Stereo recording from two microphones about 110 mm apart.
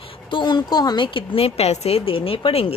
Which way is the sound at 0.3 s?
45° left (ahead or behind).